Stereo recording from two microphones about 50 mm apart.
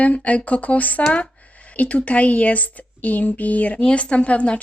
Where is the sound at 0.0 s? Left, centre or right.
Left.